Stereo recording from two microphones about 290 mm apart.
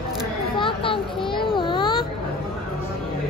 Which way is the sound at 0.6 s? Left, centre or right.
Centre.